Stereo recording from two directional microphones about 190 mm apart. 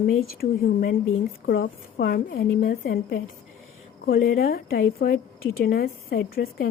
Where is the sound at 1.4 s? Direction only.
55° left (ahead or behind).